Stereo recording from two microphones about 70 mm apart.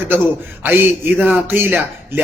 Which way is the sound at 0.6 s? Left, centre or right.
Right.